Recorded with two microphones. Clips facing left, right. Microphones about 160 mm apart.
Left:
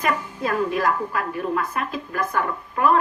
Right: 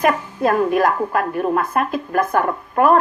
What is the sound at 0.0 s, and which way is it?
A woman's voice, 55° right (ahead or behind).